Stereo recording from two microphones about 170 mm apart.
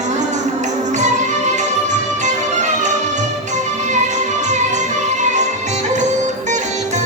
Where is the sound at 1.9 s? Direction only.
45° right (ahead or behind).